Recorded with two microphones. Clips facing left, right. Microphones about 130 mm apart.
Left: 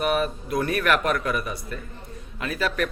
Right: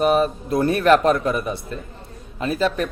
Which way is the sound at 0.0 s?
30° right (ahead or behind).